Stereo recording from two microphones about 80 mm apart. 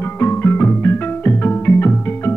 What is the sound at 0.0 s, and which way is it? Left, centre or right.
Music, left.